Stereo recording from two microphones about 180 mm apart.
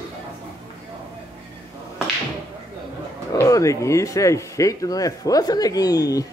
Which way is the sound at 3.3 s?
15° left (ahead or behind).